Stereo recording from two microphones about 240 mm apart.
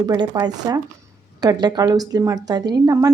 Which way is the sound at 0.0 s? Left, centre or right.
Centre.